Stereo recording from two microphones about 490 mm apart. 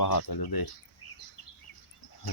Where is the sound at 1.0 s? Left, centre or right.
Left.